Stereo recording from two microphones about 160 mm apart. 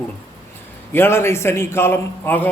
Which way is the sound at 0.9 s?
15° left (ahead or behind).